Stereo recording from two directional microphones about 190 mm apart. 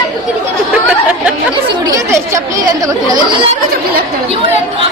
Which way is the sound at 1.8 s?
15° right (ahead or behind).